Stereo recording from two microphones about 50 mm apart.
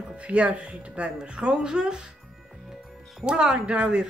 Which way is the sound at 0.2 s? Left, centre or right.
Right.